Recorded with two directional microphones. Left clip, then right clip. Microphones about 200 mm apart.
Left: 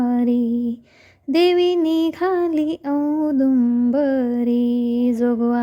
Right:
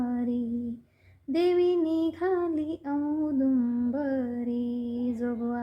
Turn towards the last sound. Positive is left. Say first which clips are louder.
# left 12 dB
turn(degrees=35)  # may be behind; listen again after turning